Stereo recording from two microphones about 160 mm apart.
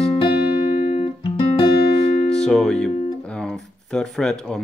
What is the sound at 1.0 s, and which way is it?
Music, 35° left (ahead or behind).